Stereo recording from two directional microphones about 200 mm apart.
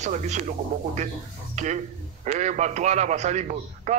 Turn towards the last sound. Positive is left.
turn(degrees=-35)  # may be behind; listen again after turning